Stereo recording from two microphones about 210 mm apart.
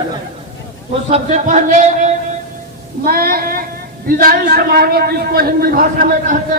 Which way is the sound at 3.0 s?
45° right (ahead or behind).